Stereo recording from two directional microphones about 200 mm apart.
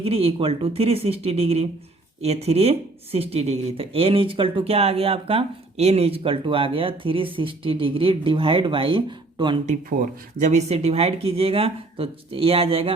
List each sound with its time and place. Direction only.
0.0 s speech: 30° right (ahead or behind)
10.3 s speech: 35° right (ahead or behind)